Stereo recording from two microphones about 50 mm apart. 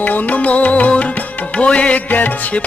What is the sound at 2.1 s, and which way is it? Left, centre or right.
Music, left.